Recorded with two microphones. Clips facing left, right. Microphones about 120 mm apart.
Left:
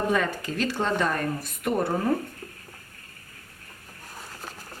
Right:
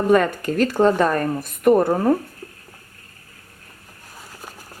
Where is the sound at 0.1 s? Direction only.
55° right (ahead or behind).